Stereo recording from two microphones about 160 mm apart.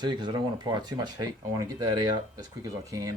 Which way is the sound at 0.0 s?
30° right (ahead or behind).